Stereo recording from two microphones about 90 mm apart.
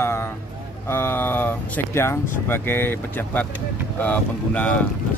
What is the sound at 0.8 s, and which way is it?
Speech, 25° left (ahead or behind).